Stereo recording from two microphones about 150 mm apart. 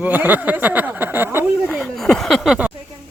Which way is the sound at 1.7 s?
Centre (ahead or behind).